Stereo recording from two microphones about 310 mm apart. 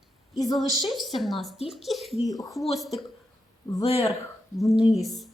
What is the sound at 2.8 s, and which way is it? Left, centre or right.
Speech, centre.